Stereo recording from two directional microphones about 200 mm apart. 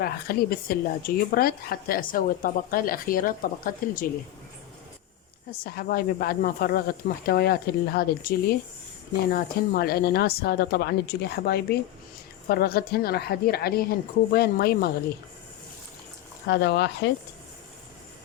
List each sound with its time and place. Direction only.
0.0 s speech: 50° left (ahead or behind)
5.6 s speech: 45° left (ahead or behind)
16.5 s speech: 60° left (ahead or behind)